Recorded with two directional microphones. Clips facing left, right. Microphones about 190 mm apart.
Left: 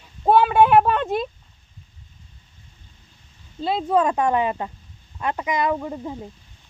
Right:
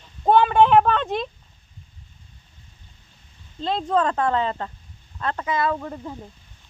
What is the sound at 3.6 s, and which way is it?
Speech, 10° left (ahead or behind).